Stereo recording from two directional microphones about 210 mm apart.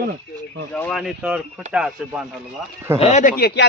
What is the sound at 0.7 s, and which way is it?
Speech, 5° left (ahead or behind).